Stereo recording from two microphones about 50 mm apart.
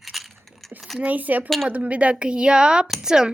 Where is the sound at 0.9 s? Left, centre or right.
Right; by 3.3 s centre.